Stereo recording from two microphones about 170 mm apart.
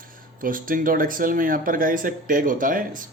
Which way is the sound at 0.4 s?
55° right (ahead or behind).